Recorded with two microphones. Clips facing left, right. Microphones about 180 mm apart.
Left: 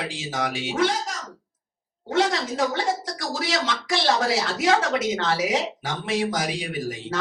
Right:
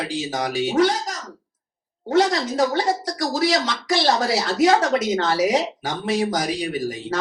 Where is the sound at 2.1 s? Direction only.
35° right (ahead or behind).